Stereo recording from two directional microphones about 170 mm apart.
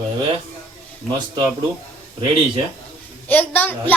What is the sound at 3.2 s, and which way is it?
Speech, 10° left (ahead or behind).